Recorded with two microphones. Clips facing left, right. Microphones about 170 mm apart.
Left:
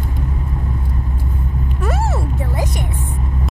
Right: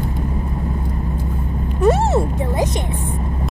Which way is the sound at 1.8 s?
25° right (ahead or behind).